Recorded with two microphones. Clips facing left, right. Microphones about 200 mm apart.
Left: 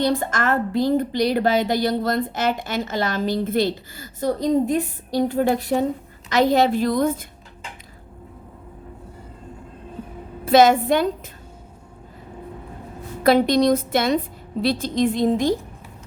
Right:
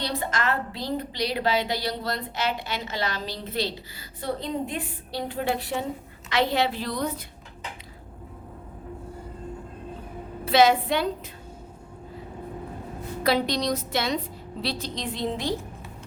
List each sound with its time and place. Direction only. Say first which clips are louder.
0.0 s a woman's voice: left 7 dB; 50° left (ahead or behind)
10.4 s a woman's voice: left 5 dB; 45° left (ahead or behind)
13.2 s a woman's voice: left 8 dB; 50° left (ahead or behind)